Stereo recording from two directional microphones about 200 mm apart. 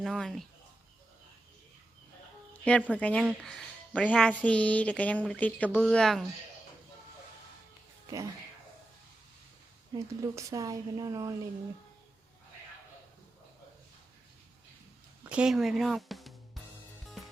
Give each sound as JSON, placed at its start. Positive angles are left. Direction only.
{"t": 0.0, "sound": "speech", "side_deg": 0}
{"t": 2.5, "sound": "a sound", "side_deg": 5}
{"t": 2.9, "sound": "speech", "side_deg": 5}
{"t": 8.0, "sound": "speech", "side_deg": -15}
{"t": 9.9, "sound": "speech", "side_deg": -15}
{"t": 15.2, "sound": "speech", "side_deg": -5}